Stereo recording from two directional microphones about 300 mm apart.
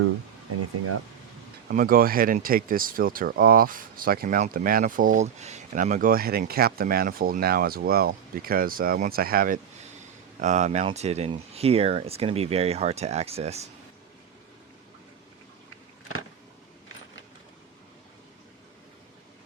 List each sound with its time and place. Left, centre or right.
1.6 s speech: right